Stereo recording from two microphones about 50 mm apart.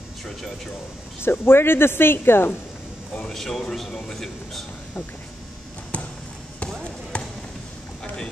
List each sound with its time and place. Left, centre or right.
1.2 s speech: left
3.3 s speech: centre
6.6 s basketball bounce: left